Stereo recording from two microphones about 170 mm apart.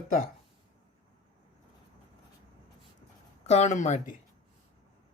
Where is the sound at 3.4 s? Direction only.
40° left (ahead or behind).